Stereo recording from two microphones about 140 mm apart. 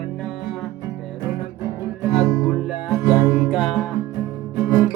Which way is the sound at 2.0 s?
5° right (ahead or behind).